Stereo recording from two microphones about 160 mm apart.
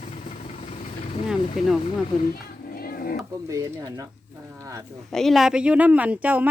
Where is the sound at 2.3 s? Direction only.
70° left (ahead or behind).